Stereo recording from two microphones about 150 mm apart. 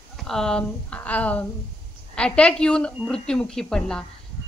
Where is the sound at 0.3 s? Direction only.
5° left (ahead or behind).